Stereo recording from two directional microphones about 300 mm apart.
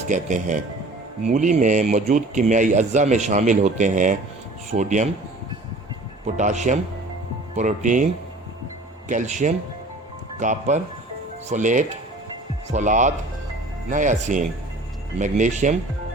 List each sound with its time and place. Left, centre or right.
0.1 s speech: right
6.2 s speech: right
9.0 s speech: right